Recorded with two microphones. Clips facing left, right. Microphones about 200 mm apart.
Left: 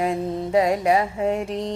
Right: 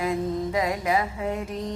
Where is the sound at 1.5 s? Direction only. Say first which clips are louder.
Left 4 dB; 75° left (ahead or behind).